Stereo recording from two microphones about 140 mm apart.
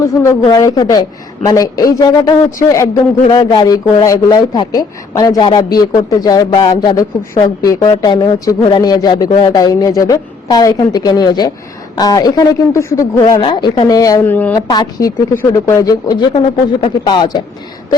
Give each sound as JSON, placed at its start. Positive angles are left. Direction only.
{"t": 0.1, "sound": "speech", "side_deg": 20}
{"t": 14.3, "sound": "speech", "side_deg": 10}
{"t": 14.7, "sound": "speech", "side_deg": 30}